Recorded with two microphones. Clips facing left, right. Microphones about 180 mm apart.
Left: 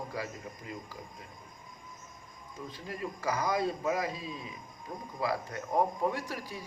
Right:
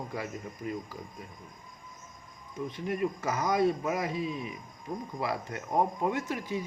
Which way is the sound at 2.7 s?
25° right (ahead or behind).